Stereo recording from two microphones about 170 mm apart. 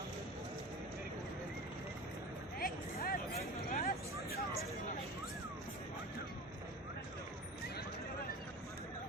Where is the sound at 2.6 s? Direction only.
60° left (ahead or behind).